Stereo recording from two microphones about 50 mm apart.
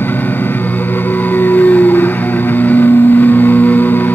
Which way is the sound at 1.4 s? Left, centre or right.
Left.